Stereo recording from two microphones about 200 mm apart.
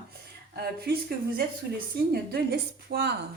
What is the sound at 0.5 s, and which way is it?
Speech, 50° right (ahead or behind).